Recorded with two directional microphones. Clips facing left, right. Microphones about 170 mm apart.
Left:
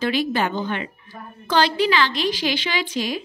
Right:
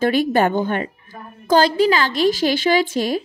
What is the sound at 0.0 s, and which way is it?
A woman's voice, 50° right (ahead or behind).